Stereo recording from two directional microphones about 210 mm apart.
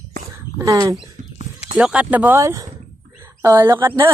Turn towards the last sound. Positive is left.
turn(degrees=-10)  # may be behind; listen again after turning